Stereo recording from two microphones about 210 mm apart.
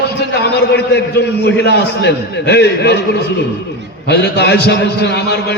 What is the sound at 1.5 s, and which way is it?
A man's voice, 55° left (ahead or behind).